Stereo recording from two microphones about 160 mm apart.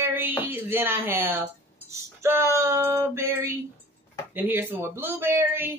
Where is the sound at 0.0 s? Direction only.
10° right (ahead or behind).